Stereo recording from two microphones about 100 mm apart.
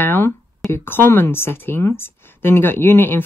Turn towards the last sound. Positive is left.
turn(degrees=20)  # may be behind; listen again after turning